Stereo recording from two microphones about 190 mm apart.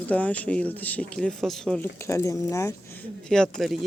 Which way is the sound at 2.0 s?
15° left (ahead or behind).